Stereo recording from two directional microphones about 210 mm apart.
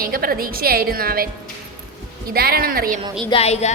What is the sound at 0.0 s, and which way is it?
A woman's voice, 45° right (ahead or behind).